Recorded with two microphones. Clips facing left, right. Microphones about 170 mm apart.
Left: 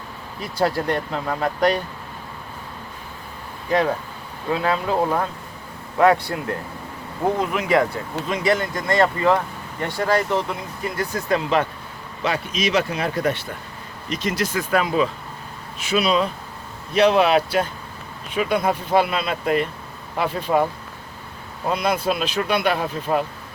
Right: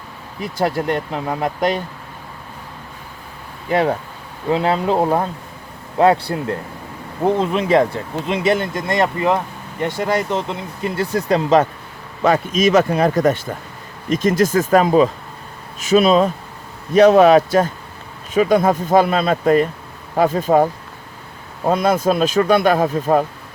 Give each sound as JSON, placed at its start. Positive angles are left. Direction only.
{"t": 0.6, "sound": "speech", "side_deg": -20}
{"t": 3.7, "sound": "speech", "side_deg": -25}